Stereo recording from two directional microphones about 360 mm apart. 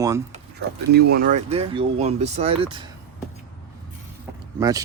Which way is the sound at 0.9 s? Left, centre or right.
Right.